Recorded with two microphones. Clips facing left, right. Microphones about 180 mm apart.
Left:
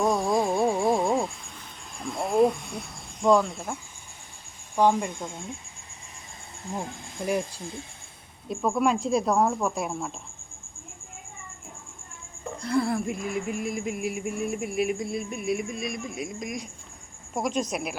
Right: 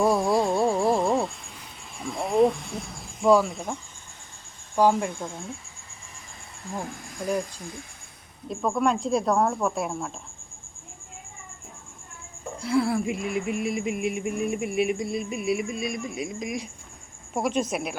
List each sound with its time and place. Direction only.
0.0 s insect: 5° right (ahead or behind)
2.0 s a sound: centre (ahead or behind)
4.8 s speech: 5° right (ahead or behind)
6.7 s speech: 25° left (ahead or behind)
8.4 s speech: centre (ahead or behind)
12.5 s speech: 5° right (ahead or behind)